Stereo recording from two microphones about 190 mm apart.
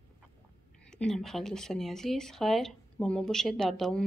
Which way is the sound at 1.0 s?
Centre (ahead or behind).